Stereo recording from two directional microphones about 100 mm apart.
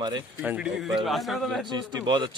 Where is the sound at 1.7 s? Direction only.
45° right (ahead or behind).